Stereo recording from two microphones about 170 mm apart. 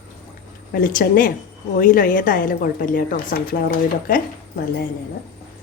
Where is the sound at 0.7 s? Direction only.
55° left (ahead or behind).